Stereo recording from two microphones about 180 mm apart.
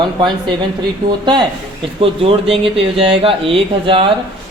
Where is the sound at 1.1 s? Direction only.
25° right (ahead or behind).